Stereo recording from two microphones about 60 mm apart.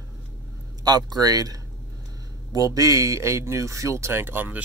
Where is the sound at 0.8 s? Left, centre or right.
Right.